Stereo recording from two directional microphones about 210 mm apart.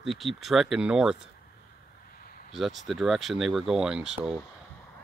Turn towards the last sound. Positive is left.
turn(degrees=-5)  # may be behind; listen again after turning